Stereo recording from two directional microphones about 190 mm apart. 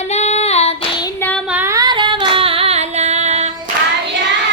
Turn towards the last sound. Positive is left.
turn(degrees=-35)  # may be behind; listen again after turning